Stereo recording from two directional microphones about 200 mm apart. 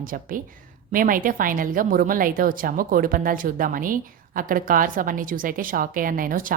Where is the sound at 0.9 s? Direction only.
45° right (ahead or behind).